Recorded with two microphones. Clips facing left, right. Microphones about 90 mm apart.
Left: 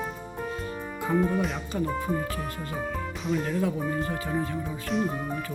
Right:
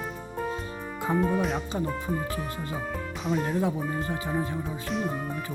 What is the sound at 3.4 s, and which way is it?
Speech, 30° right (ahead or behind).